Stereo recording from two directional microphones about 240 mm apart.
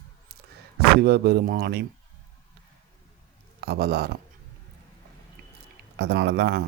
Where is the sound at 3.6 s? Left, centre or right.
Right.